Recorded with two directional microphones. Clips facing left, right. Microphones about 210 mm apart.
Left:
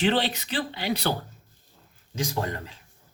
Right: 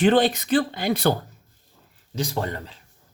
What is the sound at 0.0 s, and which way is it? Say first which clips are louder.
Speech: right 6 dB; 50° right (ahead or behind).